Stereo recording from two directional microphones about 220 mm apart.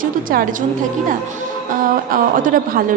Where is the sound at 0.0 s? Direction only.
40° right (ahead or behind).